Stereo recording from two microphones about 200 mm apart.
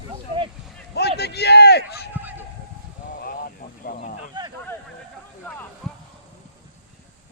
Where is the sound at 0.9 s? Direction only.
55° left (ahead or behind).